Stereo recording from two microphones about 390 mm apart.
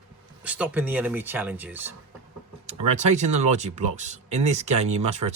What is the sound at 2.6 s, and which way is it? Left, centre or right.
Speech, centre.